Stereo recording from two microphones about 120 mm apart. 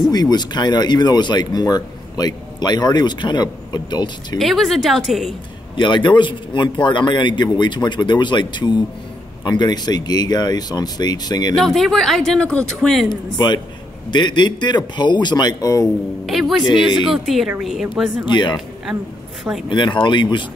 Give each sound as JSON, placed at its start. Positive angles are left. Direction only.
{"t": 0.1, "sound": "speech", "side_deg": 35}
{"t": 4.4, "sound": "speech", "side_deg": 0}
{"t": 5.8, "sound": "speech", "side_deg": 40}
{"t": 11.5, "sound": "speech", "side_deg": 0}
{"t": 13.1, "sound": "speech", "side_deg": 35}
{"t": 16.3, "sound": "speech", "side_deg": 0}
{"t": 19.7, "sound": "speech", "side_deg": 40}